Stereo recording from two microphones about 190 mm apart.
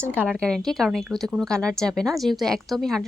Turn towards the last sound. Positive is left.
turn(degrees=0)  # may be behind; listen again after turning